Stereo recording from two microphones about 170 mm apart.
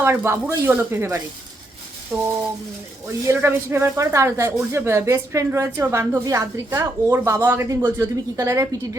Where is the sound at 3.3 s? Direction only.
15° right (ahead or behind).